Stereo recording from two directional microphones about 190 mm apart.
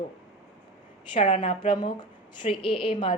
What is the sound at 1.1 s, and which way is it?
A woman's voice, 25° left (ahead or behind).